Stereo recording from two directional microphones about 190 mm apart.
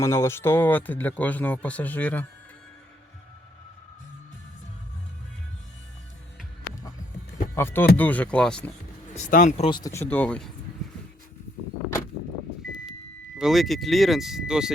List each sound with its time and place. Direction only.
0.0 s speech: 15° left (ahead or behind)
7.5 s speech: 10° left (ahead or behind)
9.1 s speech: 40° left (ahead or behind)
9.6 s speech: 20° left (ahead or behind); by 10.5 s 5° left (ahead or behind)
13.4 s speech: centre (ahead or behind)